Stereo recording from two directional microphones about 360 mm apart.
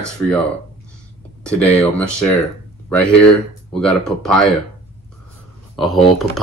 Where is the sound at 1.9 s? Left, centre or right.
Centre.